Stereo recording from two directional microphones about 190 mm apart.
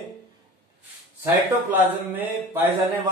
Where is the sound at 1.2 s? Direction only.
10° right (ahead or behind).